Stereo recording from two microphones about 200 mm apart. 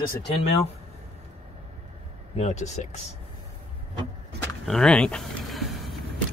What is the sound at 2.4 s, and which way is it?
Speech, 35° left (ahead or behind).